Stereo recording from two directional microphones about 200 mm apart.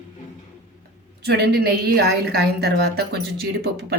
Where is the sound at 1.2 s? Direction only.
55° right (ahead or behind).